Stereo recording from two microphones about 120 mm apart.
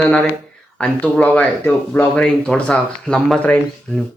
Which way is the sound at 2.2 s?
5° left (ahead or behind).